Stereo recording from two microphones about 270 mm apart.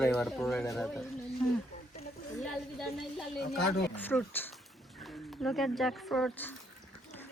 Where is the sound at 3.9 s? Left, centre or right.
Centre.